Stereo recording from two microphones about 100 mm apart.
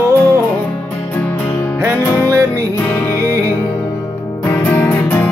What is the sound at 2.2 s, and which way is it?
Music, 30° right (ahead or behind).